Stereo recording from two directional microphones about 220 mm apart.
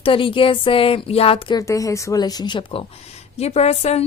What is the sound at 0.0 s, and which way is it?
A woman's voice, 25° left (ahead or behind).